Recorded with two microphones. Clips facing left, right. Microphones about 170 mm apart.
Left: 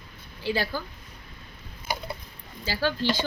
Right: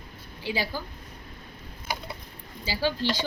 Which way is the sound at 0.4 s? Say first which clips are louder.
Left 3 dB; 15° right (ahead or behind).